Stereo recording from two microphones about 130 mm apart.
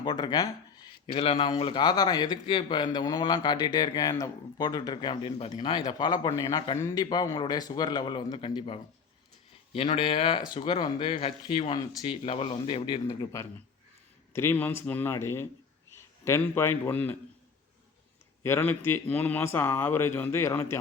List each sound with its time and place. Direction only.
0.0 s speech: 35° left (ahead or behind)
14.3 s a man's voice: 15° left (ahead or behind)
18.4 s speech: 15° left (ahead or behind)